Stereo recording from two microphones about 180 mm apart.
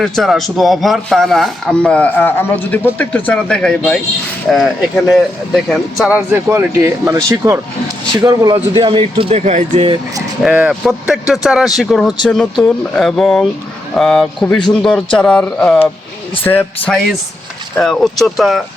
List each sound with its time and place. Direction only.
0.0 s speech: centre (ahead or behind)
5.6 s speech: centre (ahead or behind)
6.1 s speech: 10° right (ahead or behind); by 10.0 s 35° right (ahead or behind)
10.4 s speech: 5° right (ahead or behind)